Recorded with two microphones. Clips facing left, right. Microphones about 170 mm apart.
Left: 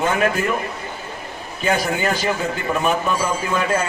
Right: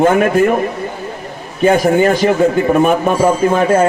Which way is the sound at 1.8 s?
50° right (ahead or behind).